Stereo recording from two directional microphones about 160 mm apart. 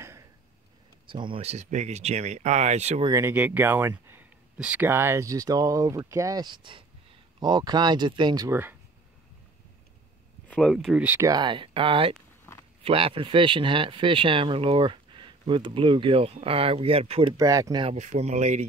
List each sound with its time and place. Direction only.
1.0 s speech: 30° right (ahead or behind)
3.1 s speech: 15° right (ahead or behind)
8.5 s speech: 15° right (ahead or behind)
10.5 s speech: 5° left (ahead or behind)
11.2 s speech: 30° right (ahead or behind)
12.5 s a sound: 15° left (ahead or behind)
12.8 s speech: 35° right (ahead or behind)
17.4 s speech: 20° right (ahead or behind)
17.8 s speech: 45° right (ahead or behind)